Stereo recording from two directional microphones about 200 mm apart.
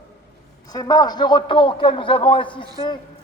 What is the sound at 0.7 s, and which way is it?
A man's voice, 20° left (ahead or behind).